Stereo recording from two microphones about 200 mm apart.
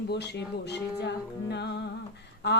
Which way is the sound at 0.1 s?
60° left (ahead or behind).